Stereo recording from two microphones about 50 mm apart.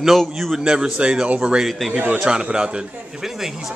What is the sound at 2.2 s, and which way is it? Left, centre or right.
Speech, centre.